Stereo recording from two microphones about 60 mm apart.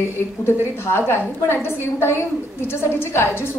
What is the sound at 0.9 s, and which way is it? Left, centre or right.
A woman's voice, left.